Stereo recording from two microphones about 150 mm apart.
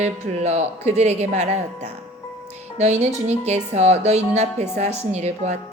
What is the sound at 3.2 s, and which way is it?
Speech, 50° right (ahead or behind).